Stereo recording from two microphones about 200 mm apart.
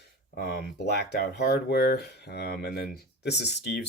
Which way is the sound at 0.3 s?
50° left (ahead or behind).